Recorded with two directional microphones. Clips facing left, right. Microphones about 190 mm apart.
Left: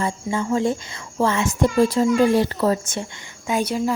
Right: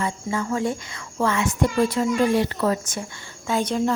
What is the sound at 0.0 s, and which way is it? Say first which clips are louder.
A child's voice: left 2 dB; 25° left (ahead or behind).